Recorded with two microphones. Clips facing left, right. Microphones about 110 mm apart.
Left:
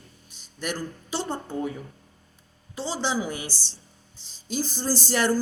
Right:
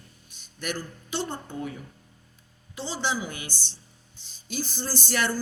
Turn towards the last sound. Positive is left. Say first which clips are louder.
# left 4 dB
turn(degrees=35)  # may be behind; listen again after turning